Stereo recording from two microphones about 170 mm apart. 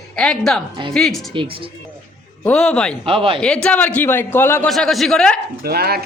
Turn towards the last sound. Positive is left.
turn(degrees=-65)  # may be behind; listen again after turning